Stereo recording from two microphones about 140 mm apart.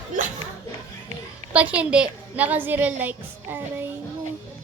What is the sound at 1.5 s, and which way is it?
A woman's voice, 10° right (ahead or behind).